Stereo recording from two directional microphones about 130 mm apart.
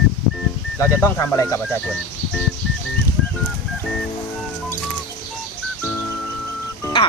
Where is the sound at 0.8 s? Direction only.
20° left (ahead or behind).